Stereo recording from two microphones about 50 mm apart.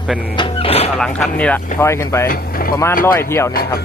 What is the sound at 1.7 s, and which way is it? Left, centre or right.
Speech, left.